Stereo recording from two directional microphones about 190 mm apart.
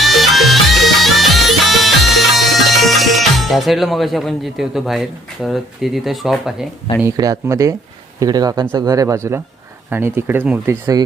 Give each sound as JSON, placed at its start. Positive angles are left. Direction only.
{"t": 0.0, "sound": "music", "side_deg": 0}
{"t": 7.0, "sound": "speech", "side_deg": -15}